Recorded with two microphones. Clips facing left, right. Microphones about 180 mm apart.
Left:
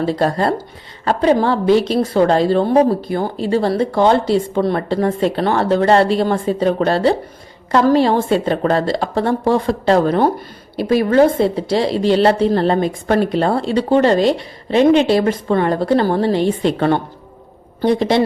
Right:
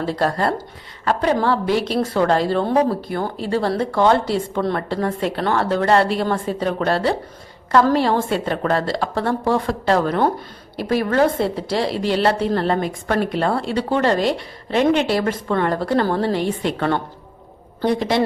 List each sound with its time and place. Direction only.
0.0 s a woman's voice: 20° left (ahead or behind)
10.8 s a woman's voice: 15° left (ahead or behind)